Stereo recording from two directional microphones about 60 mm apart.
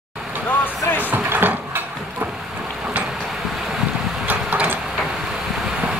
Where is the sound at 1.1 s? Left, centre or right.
Right.